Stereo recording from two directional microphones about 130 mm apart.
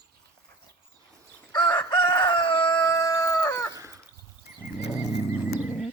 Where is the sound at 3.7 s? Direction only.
25° right (ahead or behind).